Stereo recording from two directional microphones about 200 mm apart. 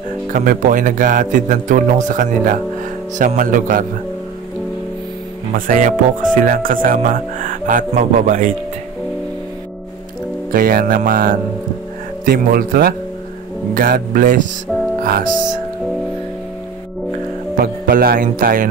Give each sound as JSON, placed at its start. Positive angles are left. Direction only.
{"t": 0.3, "sound": "speech", "side_deg": -40}
{"t": 5.5, "sound": "speech", "side_deg": -40}
{"t": 10.5, "sound": "speech", "side_deg": -45}
{"t": 17.6, "sound": "speech", "side_deg": -45}